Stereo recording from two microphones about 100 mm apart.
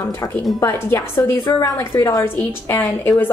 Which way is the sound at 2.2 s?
20° left (ahead or behind).